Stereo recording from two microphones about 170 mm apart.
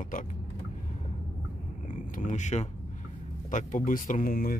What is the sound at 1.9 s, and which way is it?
Speech, 50° left (ahead or behind).